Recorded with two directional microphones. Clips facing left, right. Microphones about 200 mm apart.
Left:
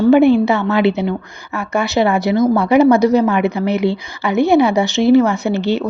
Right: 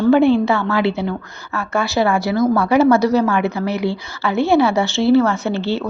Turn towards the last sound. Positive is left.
turn(degrees=15)  # may be behind; listen again after turning